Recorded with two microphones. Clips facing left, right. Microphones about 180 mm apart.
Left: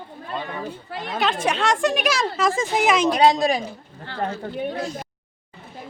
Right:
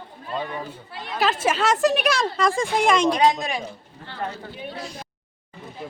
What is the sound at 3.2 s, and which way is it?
Speech, 35° left (ahead or behind).